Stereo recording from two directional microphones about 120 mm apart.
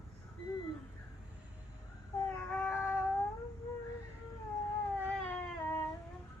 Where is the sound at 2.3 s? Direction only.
10° left (ahead or behind).